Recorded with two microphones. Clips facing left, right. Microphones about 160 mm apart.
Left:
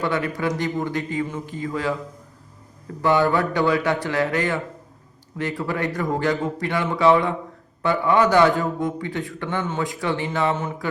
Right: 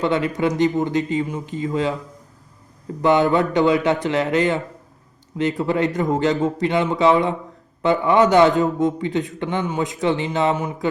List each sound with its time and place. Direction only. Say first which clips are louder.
0.0 s a man's voice: right 4 dB; 20° right (ahead or behind)
3.0 s a man's voice: right 3 dB; 20° right (ahead or behind)